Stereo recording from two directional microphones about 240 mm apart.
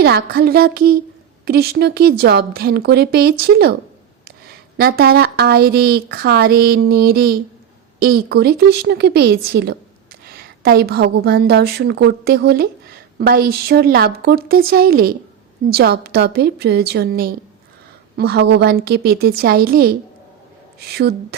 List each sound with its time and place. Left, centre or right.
0.0 s speech: right
4.8 s speech: right